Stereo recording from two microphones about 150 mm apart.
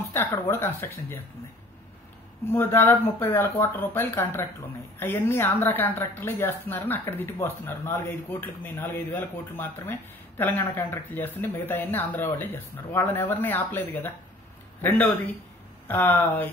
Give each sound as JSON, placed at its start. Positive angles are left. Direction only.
{"t": 0.2, "sound": "a woman's voice", "side_deg": 15}
{"t": 2.5, "sound": "a woman's voice", "side_deg": 15}